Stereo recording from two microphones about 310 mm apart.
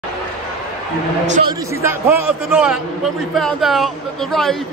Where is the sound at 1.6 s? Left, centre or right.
Centre.